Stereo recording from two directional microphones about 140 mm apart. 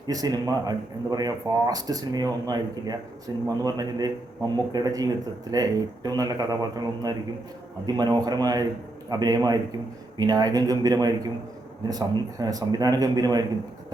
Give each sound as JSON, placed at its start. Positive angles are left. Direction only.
{"t": 0.1, "sound": "speech", "side_deg": -25}